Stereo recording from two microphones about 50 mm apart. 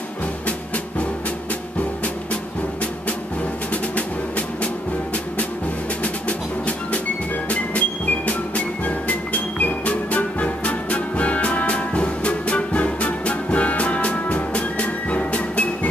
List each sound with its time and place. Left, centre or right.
6.2 s music: left